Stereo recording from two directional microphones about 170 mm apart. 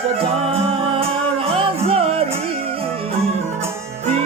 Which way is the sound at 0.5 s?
35° right (ahead or behind).